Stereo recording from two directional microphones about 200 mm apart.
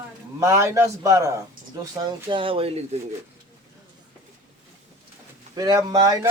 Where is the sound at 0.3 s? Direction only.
15° right (ahead or behind); by 3.0 s 30° right (ahead or behind).